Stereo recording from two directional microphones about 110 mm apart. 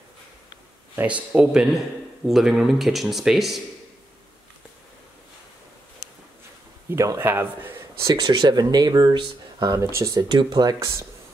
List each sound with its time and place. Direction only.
0.9 s speech: 10° right (ahead or behind)
6.9 s speech: 25° right (ahead or behind)
8.0 s speech: 40° right (ahead or behind)
10.2 s speech: 45° right (ahead or behind)